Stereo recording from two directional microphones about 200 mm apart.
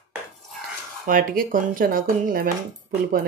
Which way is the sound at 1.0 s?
45° right (ahead or behind).